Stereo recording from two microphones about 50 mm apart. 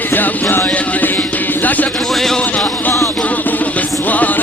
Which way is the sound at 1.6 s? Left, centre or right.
Left.